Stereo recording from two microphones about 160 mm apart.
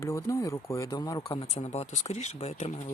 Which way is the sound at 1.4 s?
40° left (ahead or behind).